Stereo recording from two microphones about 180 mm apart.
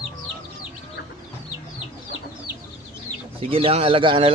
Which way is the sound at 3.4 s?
30° right (ahead or behind).